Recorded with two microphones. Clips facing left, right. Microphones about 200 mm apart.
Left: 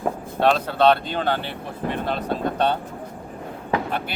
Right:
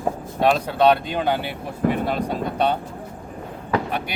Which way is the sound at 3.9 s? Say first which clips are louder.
Even; 15° right (ahead or behind).